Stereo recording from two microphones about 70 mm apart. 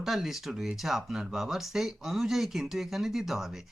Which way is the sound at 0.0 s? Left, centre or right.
Centre.